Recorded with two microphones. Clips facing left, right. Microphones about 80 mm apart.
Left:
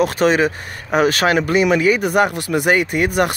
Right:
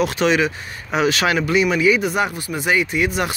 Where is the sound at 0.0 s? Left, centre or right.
Left.